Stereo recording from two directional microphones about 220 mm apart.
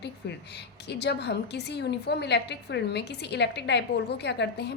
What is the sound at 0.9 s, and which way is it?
A woman's voice, 50° left (ahead or behind).